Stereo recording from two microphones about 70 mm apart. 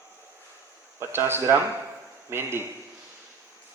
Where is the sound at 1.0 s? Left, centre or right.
Right.